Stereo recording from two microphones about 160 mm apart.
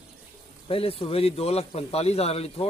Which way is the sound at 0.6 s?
35° left (ahead or behind).